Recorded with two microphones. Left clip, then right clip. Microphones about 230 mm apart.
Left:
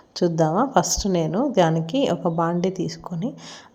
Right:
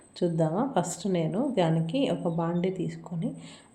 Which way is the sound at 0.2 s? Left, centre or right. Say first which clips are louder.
Left 7 dB; left.